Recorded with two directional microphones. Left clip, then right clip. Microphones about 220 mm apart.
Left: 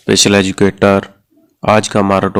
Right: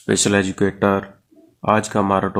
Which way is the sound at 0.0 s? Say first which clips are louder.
Left 8 dB; 30° left (ahead or behind).